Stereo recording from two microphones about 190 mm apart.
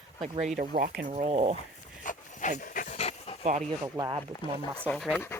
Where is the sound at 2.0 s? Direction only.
45° left (ahead or behind).